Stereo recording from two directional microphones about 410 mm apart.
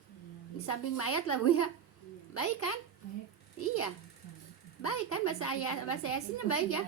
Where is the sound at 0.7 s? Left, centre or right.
Left.